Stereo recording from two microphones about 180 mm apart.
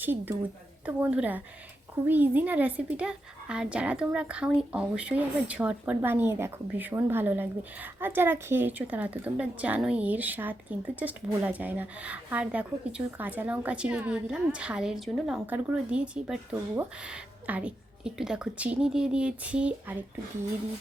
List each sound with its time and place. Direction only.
0.0 s a woman's voice: 10° right (ahead or behind)